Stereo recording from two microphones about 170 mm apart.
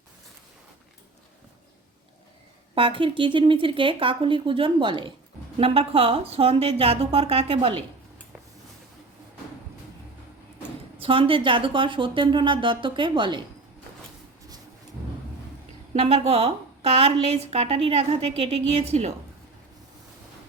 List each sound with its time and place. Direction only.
2.7 s a woman's voice: 30° right (ahead or behind)
10.9 s a woman's voice: 30° right (ahead or behind)
15.9 s a woman's voice: 35° right (ahead or behind)